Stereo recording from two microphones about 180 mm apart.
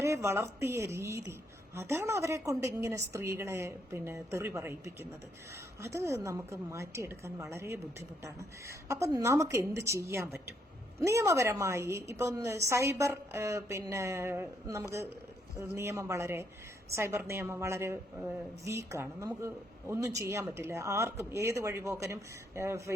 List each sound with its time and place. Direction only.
0.0 s a woman's voice: 15° right (ahead or behind)
5.8 s a woman's voice: 15° right (ahead or behind)